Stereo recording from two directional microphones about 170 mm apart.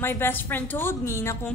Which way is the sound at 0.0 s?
15° left (ahead or behind).